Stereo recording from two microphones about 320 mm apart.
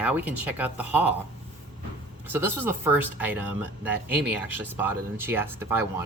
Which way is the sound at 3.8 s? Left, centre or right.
Centre.